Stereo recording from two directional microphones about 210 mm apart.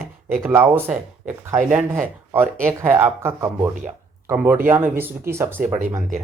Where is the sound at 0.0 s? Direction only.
10° right (ahead or behind).